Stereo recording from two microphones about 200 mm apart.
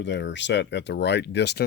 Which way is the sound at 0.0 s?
65° left (ahead or behind).